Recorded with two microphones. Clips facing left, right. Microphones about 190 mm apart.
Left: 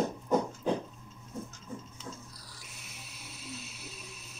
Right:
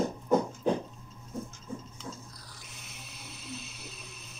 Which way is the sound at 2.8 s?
5° left (ahead or behind).